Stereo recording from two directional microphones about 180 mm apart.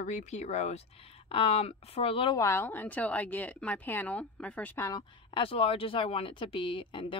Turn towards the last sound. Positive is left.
turn(degrees=30)  # may be behind; listen again after turning